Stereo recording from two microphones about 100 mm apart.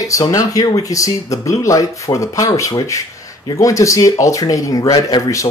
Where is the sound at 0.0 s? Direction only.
35° left (ahead or behind).